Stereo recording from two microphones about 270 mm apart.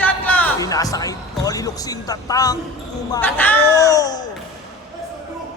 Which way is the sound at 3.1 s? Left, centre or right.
Centre.